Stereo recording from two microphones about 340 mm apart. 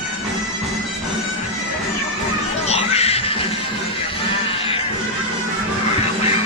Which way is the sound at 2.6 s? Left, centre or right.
Centre.